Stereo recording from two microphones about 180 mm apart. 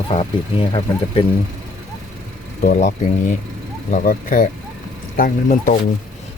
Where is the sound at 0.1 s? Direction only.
35° left (ahead or behind).